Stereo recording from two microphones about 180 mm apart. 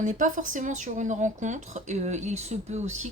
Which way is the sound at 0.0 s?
45° right (ahead or behind).